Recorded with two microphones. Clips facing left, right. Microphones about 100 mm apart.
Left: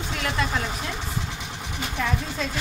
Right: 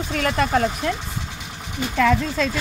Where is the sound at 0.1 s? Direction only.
50° right (ahead or behind).